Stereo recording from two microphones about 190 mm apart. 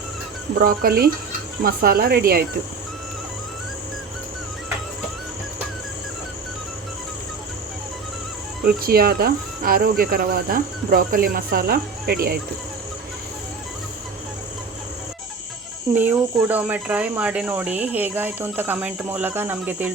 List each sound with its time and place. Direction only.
0.6 s speech: 50° right (ahead or behind)
8.6 s speech: 50° right (ahead or behind)
16.0 s speech: 10° right (ahead or behind)